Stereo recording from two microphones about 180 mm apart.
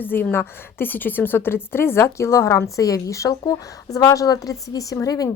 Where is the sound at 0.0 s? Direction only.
10° left (ahead or behind).